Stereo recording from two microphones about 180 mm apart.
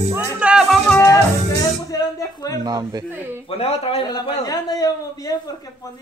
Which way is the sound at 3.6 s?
35° left (ahead or behind).